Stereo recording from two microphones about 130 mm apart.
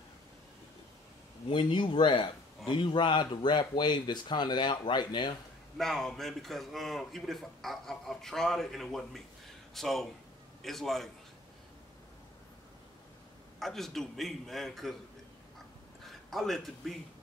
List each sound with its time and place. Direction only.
1.5 s speech: 40° left (ahead or behind)
5.8 s a man's voice: 5° left (ahead or behind)
13.6 s a man's voice: 5° left (ahead or behind)
16.0 s a man's voice: centre (ahead or behind)